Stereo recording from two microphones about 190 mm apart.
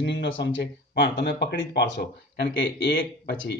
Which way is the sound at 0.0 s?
65° left (ahead or behind).